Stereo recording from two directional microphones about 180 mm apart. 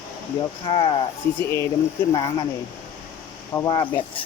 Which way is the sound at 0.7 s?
25° left (ahead or behind).